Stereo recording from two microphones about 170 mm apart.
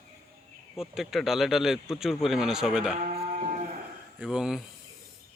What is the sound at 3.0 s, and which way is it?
Sheep, 40° right (ahead or behind).